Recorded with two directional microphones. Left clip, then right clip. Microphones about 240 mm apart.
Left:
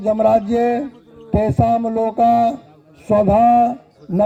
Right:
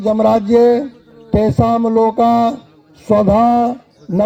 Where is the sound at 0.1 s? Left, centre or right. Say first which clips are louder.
Right 2 dB; right.